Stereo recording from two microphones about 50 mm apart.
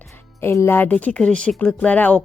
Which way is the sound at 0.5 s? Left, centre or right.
Left.